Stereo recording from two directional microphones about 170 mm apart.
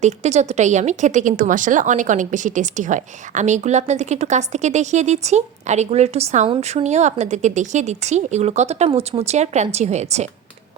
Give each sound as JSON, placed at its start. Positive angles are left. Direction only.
{"t": 0.0, "sound": "speech", "side_deg": -40}